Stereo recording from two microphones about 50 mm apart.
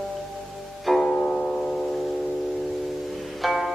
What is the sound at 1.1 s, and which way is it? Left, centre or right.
Music, left.